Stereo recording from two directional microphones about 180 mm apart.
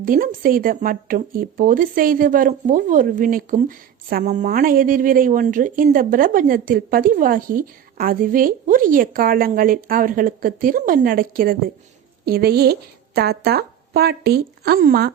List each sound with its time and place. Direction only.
0.0 s speech: 50° right (ahead or behind)